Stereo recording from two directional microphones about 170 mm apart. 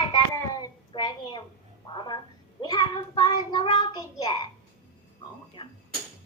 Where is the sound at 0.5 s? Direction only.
25° left (ahead or behind).